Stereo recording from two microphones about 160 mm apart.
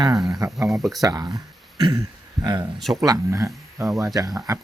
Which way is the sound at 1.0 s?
25° right (ahead or behind).